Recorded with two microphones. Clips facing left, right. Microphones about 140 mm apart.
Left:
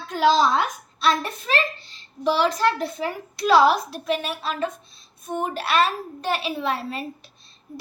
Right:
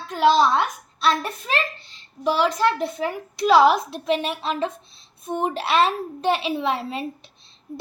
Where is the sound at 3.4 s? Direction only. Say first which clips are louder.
Right 1 dB; 15° right (ahead or behind).